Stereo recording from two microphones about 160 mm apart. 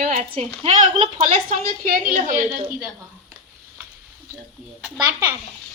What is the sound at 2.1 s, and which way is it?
Speech, 50° right (ahead or behind).